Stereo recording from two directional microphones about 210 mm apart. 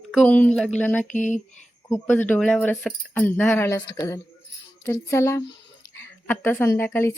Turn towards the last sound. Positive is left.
turn(degrees=10)  # may be behind; listen again after turning